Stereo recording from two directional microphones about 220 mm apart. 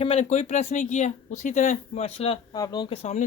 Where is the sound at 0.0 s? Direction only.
30° left (ahead or behind).